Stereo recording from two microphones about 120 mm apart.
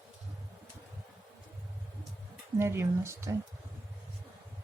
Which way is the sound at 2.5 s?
20° right (ahead or behind).